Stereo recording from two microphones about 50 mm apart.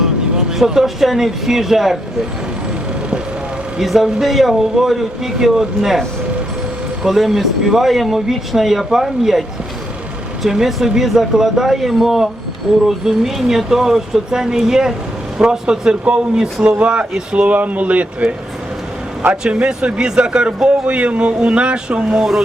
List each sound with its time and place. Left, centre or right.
0.0 s speech: centre
3.8 s speech: centre
7.0 s speech: centre
10.4 s speech: centre
16.7 s a man's voice: right
19.4 s a man's voice: centre